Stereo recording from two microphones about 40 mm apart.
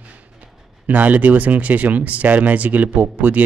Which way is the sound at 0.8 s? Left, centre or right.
Right.